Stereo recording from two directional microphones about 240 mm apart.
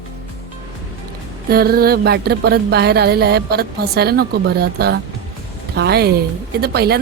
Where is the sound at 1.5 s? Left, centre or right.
Right.